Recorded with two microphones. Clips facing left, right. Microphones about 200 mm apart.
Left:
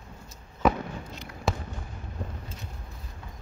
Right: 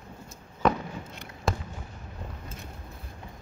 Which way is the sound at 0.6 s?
5° left (ahead or behind).